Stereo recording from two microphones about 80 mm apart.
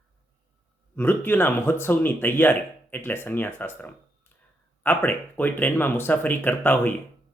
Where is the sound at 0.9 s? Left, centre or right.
Left.